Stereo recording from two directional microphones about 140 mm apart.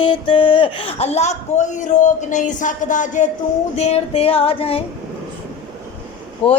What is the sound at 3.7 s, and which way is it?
A man's voice, 50° left (ahead or behind).